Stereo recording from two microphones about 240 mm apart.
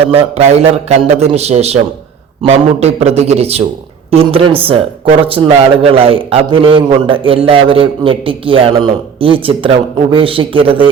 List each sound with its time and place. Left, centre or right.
0.0 s a man's voice: right